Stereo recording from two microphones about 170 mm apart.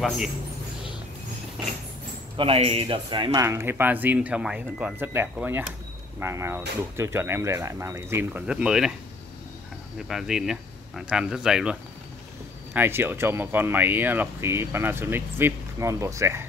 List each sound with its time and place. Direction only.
2.3 s speech: 35° right (ahead or behind)
3.4 s speech: 15° right (ahead or behind)
9.9 s speech: 5° right (ahead or behind)